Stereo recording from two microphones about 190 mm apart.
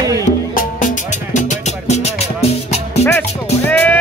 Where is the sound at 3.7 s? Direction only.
10° left (ahead or behind).